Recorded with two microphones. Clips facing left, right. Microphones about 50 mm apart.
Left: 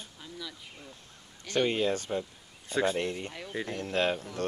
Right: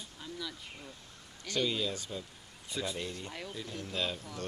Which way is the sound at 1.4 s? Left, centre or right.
Left.